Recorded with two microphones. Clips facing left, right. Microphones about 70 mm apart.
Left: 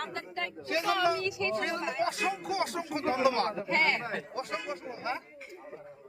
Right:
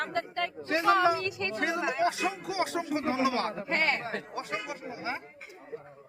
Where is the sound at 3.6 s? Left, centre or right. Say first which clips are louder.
Left 1 dB; right.